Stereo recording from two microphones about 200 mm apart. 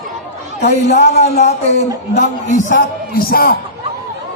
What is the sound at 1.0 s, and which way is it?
Speech, 35° left (ahead or behind).